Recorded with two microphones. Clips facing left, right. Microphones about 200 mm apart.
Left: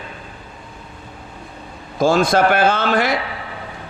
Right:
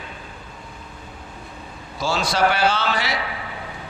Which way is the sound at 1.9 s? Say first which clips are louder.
Left 7 dB; 50° left (ahead or behind).